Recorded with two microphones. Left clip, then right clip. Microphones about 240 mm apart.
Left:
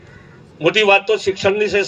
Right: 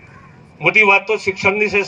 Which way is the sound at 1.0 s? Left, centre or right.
Centre.